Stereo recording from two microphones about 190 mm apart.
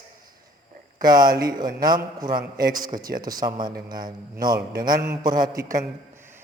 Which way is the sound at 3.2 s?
20° right (ahead or behind).